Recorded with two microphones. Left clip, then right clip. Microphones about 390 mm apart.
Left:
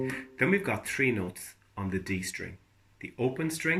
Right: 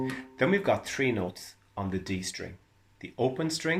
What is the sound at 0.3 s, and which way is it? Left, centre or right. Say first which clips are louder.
Speech: right 3 dB; centre.